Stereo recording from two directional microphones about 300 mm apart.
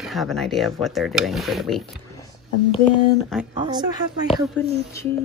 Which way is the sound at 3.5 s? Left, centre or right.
Centre.